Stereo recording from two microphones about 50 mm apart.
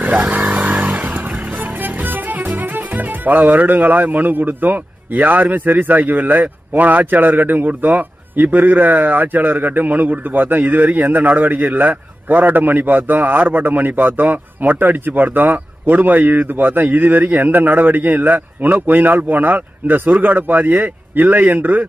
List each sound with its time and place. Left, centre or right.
0.2 s vehicle: centre
1.0 s music: right
10.6 s a man's voice: right